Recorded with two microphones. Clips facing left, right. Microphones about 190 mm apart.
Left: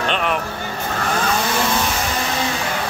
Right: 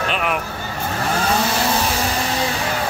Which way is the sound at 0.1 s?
5° right (ahead or behind).